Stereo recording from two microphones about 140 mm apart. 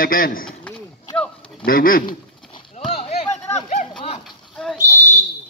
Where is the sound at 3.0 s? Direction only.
45° left (ahead or behind).